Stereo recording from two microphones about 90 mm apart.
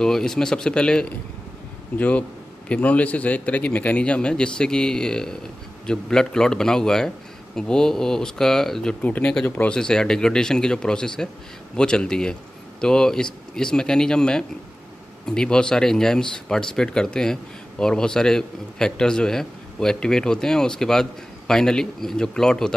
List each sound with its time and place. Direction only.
0.0 s speech: 5° left (ahead or behind)
9.0 s speech: 15° left (ahead or behind)